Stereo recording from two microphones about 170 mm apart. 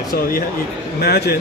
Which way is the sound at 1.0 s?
70° left (ahead or behind).